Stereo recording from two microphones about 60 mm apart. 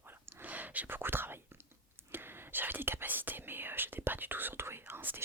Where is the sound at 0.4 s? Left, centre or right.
Right.